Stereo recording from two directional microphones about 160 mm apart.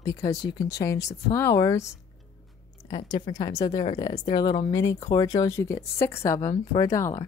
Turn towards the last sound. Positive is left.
turn(degrees=20)  # may be behind; listen again after turning